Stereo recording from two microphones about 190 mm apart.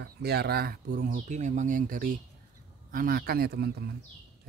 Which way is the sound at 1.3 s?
40° right (ahead or behind).